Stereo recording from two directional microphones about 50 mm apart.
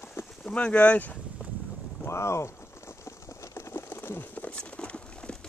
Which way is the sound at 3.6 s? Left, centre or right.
Left.